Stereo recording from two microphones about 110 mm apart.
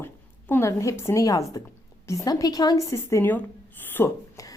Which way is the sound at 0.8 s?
30° left (ahead or behind).